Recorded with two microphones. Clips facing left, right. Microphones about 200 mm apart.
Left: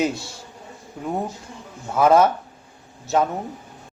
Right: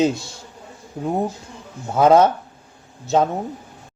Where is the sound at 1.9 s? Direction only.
20° right (ahead or behind).